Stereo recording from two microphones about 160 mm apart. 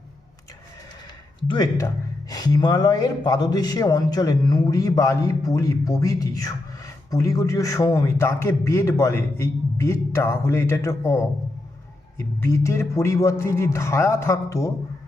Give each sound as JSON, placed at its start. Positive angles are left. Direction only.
{"t": 1.5, "sound": "speech", "side_deg": 25}